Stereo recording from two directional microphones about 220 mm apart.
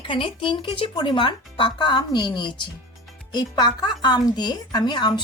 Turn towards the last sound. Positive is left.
turn(degrees=20)  # may be behind; listen again after turning